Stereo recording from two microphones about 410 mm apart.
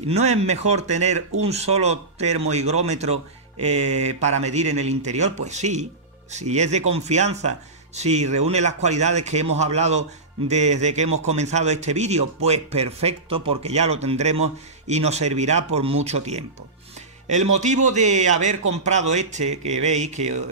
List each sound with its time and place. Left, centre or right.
0.1 s speech: centre
17.8 s speech: centre